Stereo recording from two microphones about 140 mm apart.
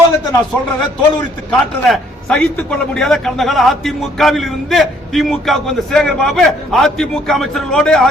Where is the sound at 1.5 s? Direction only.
5° left (ahead or behind).